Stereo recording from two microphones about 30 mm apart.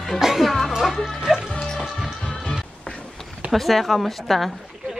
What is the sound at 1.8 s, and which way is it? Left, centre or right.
Music, centre.